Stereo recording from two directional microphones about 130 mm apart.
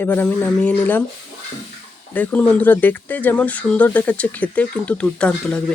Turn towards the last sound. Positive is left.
turn(degrees=10)  # may be behind; listen again after turning